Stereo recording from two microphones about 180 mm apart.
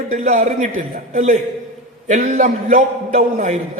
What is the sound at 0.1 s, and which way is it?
A man's voice, 45° right (ahead or behind).